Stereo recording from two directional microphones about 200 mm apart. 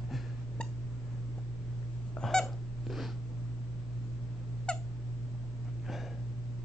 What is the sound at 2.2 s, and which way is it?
Squeak, centre (ahead or behind).